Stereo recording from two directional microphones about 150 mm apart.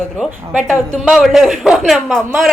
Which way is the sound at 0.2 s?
5° right (ahead or behind).